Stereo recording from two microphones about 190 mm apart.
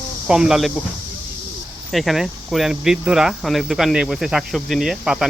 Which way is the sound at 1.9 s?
Centre (ahead or behind).